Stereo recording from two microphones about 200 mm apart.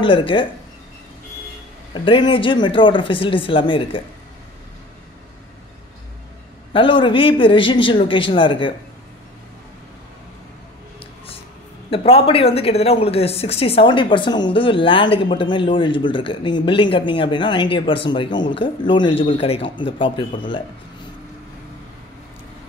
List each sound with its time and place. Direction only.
0.0 s speech: 25° left (ahead or behind)
2.0 s speech: 25° left (ahead or behind)
6.7 s speech: 25° left (ahead or behind)
11.9 s speech: 30° left (ahead or behind)